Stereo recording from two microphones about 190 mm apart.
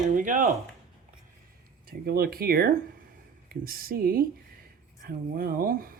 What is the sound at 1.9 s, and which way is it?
Speech, 55° right (ahead or behind).